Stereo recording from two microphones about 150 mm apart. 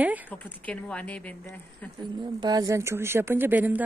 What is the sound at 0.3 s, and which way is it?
A woman's voice, 10° left (ahead or behind).